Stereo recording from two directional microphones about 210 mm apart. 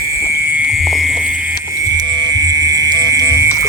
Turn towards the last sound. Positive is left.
turn(degrees=-15)  # may be behind; listen again after turning